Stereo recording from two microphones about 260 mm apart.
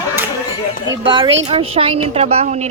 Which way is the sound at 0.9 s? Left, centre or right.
Centre.